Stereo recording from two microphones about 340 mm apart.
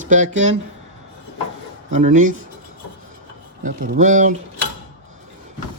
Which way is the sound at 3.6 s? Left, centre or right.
Right.